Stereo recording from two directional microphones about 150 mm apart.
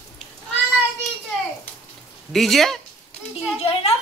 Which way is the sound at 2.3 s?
Centre (ahead or behind).